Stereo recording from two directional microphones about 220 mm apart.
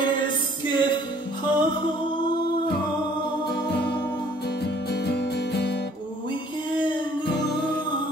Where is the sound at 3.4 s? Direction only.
50° left (ahead or behind).